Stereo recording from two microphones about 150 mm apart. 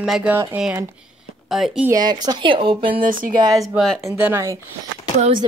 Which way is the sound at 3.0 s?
65° right (ahead or behind).